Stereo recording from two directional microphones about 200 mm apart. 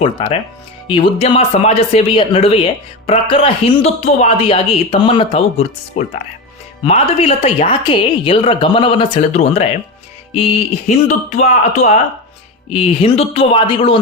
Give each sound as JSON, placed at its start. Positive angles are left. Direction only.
{"t": 0.0, "sound": "speech", "side_deg": 25}